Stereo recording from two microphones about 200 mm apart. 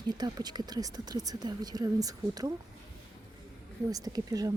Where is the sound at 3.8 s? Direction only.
20° right (ahead or behind).